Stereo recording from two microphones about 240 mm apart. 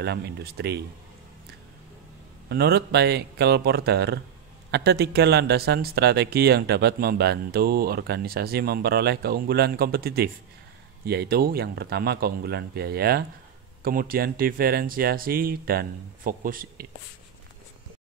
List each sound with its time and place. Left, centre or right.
0.0 s speech: right
2.5 s speech: right